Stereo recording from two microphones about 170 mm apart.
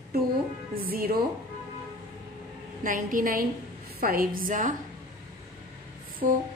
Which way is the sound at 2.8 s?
50° right (ahead or behind).